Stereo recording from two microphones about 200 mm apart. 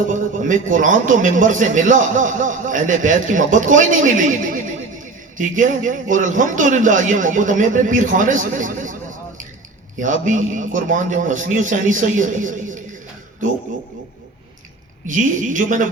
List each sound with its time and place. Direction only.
0.1 s a man's voice: 40° right (ahead or behind)
15.0 s a man's voice: 40° right (ahead or behind)